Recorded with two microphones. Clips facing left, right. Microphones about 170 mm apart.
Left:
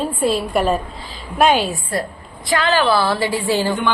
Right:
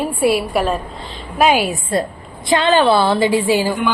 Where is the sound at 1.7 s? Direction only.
25° right (ahead or behind).